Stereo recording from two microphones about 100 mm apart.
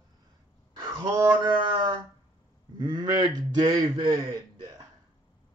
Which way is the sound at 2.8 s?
45° right (ahead or behind).